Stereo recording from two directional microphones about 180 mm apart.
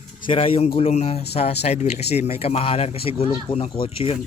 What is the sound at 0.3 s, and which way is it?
A man's voice, 30° left (ahead or behind).